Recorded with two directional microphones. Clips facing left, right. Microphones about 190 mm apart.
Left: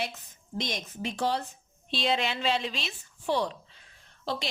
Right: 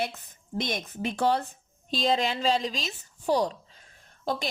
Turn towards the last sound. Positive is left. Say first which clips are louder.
# right 3 dB
turn(degrees=-45)  # may be behind; listen again after turning